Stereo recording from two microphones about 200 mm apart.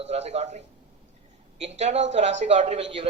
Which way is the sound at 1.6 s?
35° right (ahead or behind).